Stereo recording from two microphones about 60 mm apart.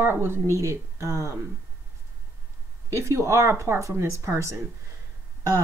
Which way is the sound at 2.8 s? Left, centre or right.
Right.